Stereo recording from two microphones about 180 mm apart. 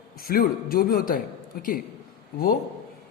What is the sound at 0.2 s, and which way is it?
A man's voice, 55° left (ahead or behind).